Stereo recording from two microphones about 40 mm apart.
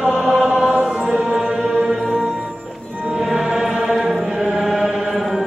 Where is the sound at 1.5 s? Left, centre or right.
Centre.